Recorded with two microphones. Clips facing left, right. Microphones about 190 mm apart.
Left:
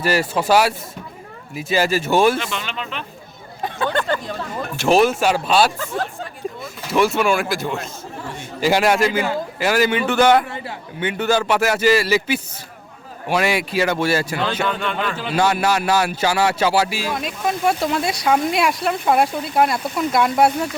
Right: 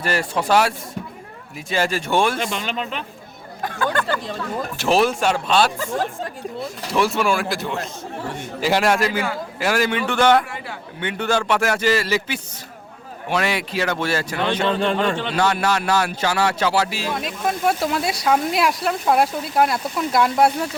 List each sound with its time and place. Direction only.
0.0 s speech: 5° left (ahead or behind)
2.4 s speech: 45° right (ahead or behind)
4.8 s speech: centre (ahead or behind)
6.9 s speech: centre (ahead or behind)
14.6 s a man's voice: 30° right (ahead or behind)
15.2 s speech: 10° left (ahead or behind)